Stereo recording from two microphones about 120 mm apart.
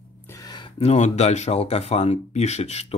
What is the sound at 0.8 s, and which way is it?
Speech, 65° left (ahead or behind).